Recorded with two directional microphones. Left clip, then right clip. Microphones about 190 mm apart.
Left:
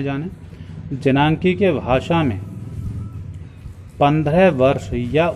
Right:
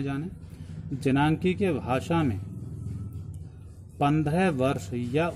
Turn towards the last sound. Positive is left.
turn(degrees=-15)  # may be behind; listen again after turning